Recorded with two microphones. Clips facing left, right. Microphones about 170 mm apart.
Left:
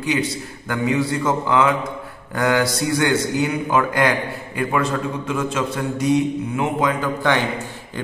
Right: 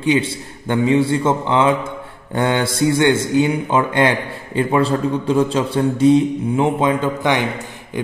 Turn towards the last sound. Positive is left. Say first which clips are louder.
# right 2 dB
turn(degrees=-20)  # may be behind; listen again after turning